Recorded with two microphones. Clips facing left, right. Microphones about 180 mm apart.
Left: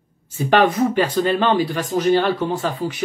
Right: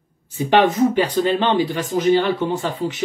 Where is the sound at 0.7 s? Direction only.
15° right (ahead or behind).